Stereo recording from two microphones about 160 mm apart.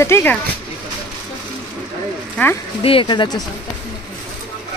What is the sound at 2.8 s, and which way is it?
Speech, 35° left (ahead or behind).